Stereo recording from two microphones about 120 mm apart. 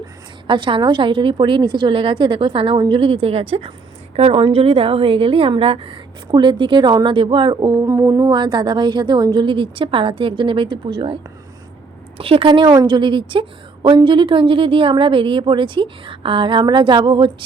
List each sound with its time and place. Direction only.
0.4 s a woman's voice: 45° right (ahead or behind)
7.9 s speech: 25° right (ahead or behind)
8.3 s a woman's voice: 40° right (ahead or behind)
12.7 s speech: 30° right (ahead or behind)
13.0 s a woman's voice: 45° right (ahead or behind)